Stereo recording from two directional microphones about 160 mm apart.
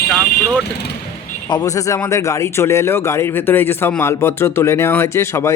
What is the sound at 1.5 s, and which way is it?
Speech, 20° left (ahead or behind).